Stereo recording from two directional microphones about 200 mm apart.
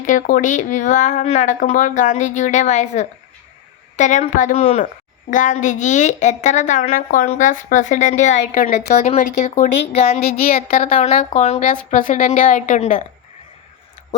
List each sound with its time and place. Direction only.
0.0 s a woman's voice: 40° left (ahead or behind)
10.2 s a sound: 50° left (ahead or behind)
10.9 s a woman's voice: 30° left (ahead or behind)